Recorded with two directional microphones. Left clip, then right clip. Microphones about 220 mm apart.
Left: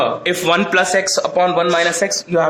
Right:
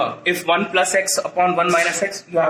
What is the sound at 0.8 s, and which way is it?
Speech, 30° left (ahead or behind).